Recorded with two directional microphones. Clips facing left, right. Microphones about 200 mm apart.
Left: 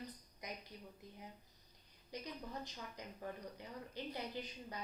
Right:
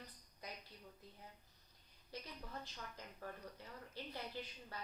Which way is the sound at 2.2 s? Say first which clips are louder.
Left 5 dB; 15° left (ahead or behind).